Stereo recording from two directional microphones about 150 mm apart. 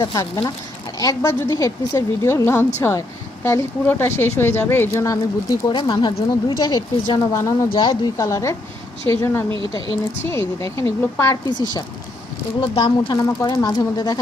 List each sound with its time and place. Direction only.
0.0 s speech: 25° left (ahead or behind)
13.1 s speech: 25° left (ahead or behind)